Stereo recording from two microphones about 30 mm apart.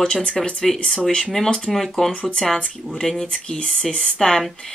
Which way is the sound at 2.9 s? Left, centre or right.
Centre.